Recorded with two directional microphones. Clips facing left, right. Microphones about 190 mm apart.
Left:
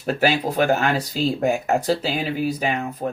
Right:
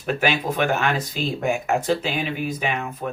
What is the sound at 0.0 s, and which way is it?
Speech, 35° left (ahead or behind).